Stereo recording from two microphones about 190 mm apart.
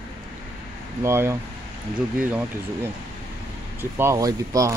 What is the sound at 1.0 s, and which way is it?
Speech, 15° right (ahead or behind).